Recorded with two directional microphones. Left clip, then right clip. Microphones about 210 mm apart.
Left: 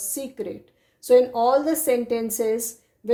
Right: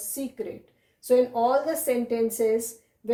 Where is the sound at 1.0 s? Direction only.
40° left (ahead or behind).